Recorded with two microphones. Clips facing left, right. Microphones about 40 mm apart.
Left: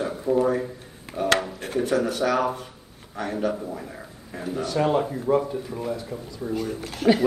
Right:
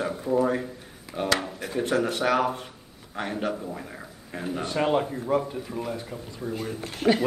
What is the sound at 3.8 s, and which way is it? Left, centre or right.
Speech, centre.